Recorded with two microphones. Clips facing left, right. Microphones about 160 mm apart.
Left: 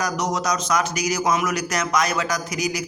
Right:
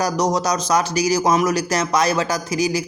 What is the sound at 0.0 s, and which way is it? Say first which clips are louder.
Speech: right 5 dB; 35° right (ahead or behind).